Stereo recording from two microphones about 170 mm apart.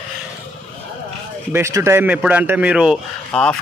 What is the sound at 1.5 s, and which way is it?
A man's voice, 15° right (ahead or behind).